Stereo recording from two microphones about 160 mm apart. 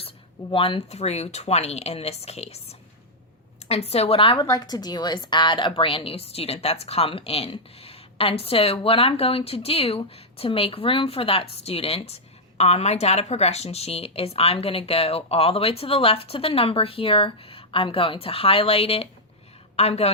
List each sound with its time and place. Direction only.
0.5 s speech: 35° left (ahead or behind)
3.7 s speech: 40° left (ahead or behind)
4.4 s speech: 25° left (ahead or behind); by 20.1 s 40° left (ahead or behind)